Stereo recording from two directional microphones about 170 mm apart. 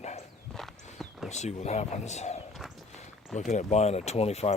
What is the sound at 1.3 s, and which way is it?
Speech, 40° left (ahead or behind).